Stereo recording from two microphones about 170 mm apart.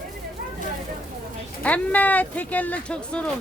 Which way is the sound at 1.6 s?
10° left (ahead or behind).